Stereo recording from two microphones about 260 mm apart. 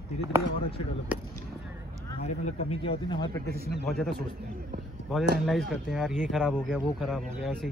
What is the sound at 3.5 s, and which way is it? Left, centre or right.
Speech, left.